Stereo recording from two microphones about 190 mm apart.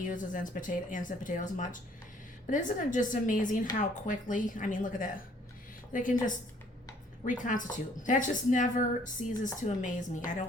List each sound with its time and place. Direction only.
0.0 s speech: 45° left (ahead or behind)